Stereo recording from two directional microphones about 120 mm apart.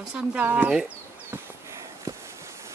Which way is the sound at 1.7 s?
25° right (ahead or behind).